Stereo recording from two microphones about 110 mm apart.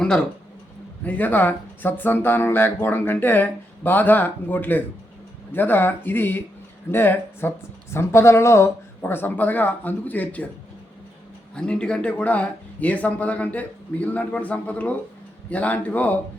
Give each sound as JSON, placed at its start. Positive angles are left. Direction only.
{"t": 0.0, "sound": "speech", "side_deg": 5}
{"t": 11.5, "sound": "speech", "side_deg": 10}